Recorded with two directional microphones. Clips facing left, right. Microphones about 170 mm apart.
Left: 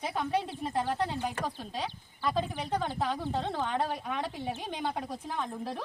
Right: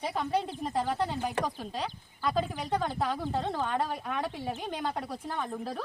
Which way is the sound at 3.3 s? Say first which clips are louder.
Right 1 dB; centre (ahead or behind).